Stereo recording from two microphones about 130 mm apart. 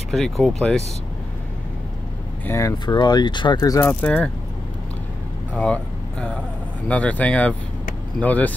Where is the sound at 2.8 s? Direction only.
35° left (ahead or behind).